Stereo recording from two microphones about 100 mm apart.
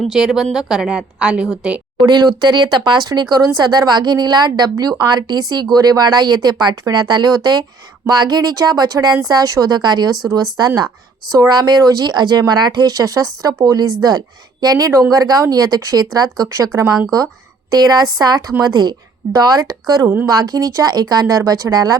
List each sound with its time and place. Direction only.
0.0 s a woman's voice: 5° right (ahead or behind)
2.0 s a woman's voice: 45° right (ahead or behind)